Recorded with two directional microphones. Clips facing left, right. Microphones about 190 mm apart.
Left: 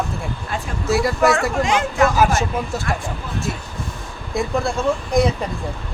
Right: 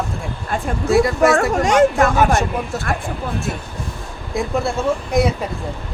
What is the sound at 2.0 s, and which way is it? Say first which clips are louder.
Speech: right 1 dB; centre (ahead or behind).